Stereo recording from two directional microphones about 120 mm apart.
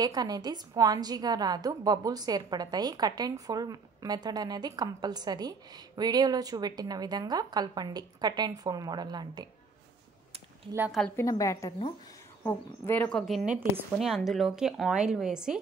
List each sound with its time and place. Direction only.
0.0 s a woman's voice: 35° right (ahead or behind)
11.1 s a woman's voice: 25° left (ahead or behind)
12.4 s a woman's voice: 15° left (ahead or behind)
13.9 s speech: centre (ahead or behind)